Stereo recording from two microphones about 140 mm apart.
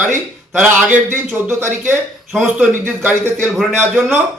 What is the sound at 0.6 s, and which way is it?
A man's voice, 10° right (ahead or behind).